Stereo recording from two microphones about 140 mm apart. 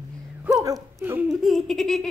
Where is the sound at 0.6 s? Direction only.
25° right (ahead or behind).